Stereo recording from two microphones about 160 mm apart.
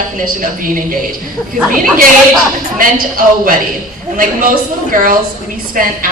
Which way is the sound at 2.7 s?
60° right (ahead or behind).